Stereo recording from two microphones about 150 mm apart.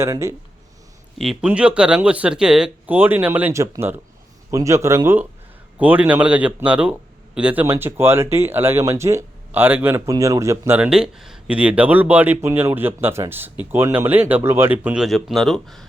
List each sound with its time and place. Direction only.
0.0 s a man's voice: 20° right (ahead or behind)
1.2 s a man's voice: 5° right (ahead or behind); by 10.8 s 20° right (ahead or behind)
10.8 s speech: 5° right (ahead or behind)
15.0 s speech: centre (ahead or behind)